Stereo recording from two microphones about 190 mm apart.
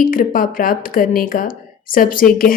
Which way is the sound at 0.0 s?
45° left (ahead or behind).